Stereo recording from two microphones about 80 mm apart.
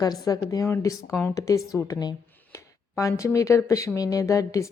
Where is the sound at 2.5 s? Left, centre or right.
Left.